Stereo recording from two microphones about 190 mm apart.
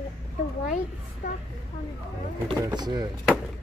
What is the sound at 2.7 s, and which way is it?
Speech, 20° right (ahead or behind).